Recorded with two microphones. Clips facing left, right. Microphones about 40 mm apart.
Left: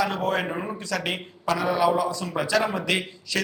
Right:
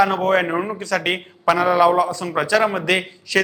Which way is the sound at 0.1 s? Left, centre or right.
Right.